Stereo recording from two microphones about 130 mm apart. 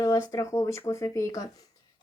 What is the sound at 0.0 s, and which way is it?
A child's voice, 25° left (ahead or behind).